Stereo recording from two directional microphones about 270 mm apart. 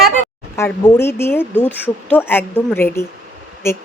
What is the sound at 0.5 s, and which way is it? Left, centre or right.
Speech, centre.